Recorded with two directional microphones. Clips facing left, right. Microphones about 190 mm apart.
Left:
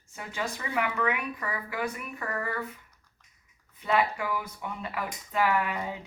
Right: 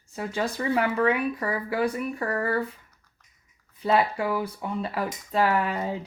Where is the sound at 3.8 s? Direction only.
35° right (ahead or behind).